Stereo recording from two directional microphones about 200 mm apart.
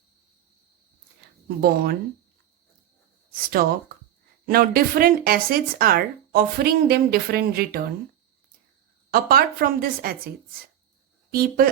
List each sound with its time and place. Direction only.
1.6 s speech: 50° right (ahead or behind)
3.3 s speech: 45° right (ahead or behind)
9.0 s speech: 50° right (ahead or behind)
11.3 s speech: 50° right (ahead or behind)